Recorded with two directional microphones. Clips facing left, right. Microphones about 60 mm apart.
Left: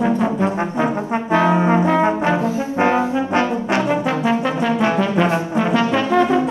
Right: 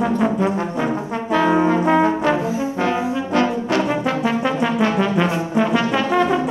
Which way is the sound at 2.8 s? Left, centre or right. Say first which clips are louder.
Left 6 dB; left.